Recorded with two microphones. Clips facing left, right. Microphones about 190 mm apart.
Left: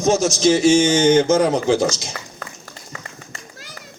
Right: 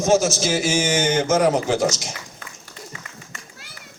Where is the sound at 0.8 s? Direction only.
30° left (ahead or behind).